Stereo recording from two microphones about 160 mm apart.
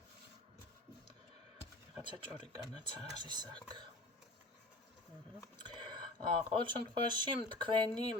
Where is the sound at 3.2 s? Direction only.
25° right (ahead or behind).